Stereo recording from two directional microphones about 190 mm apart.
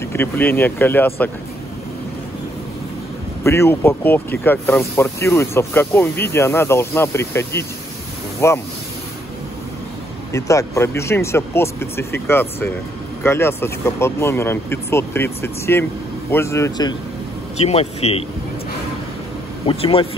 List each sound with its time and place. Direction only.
0.0 s speech: 10° left (ahead or behind)
3.4 s speech: 15° left (ahead or behind)
10.3 s speech: 15° left (ahead or behind)
17.6 s a man's voice: 35° left (ahead or behind)
19.6 s speech: 30° left (ahead or behind)